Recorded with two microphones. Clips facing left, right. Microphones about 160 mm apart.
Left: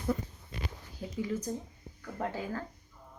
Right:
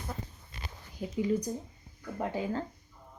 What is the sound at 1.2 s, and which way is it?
Speech, 15° right (ahead or behind).